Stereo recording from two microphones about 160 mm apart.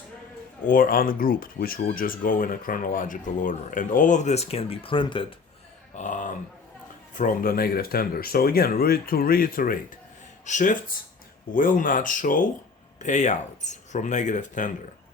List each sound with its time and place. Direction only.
0.7 s speech: 60° left (ahead or behind); by 5.2 s 30° left (ahead or behind)
6.0 s speech: 50° left (ahead or behind)
10.4 s speech: 50° left (ahead or behind)